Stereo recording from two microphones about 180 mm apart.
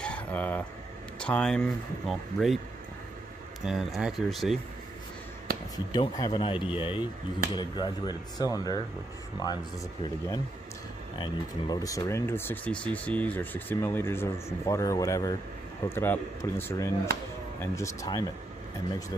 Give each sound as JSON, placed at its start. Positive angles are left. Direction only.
{"t": 0.0, "sound": "a sound", "side_deg": 10}
{"t": 1.2, "sound": "speech", "side_deg": 5}
{"t": 3.6, "sound": "speech", "side_deg": 0}
{"t": 5.9, "sound": "speech", "side_deg": 20}
{"t": 10.0, "sound": "speech", "side_deg": 20}
{"t": 11.7, "sound": "speech", "side_deg": 20}